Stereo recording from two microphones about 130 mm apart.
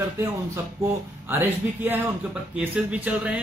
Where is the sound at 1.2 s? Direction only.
15° right (ahead or behind).